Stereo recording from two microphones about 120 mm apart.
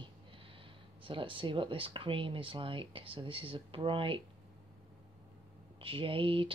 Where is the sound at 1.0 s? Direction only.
45° right (ahead or behind).